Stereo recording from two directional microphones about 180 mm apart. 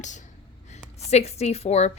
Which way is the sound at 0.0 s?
40° left (ahead or behind).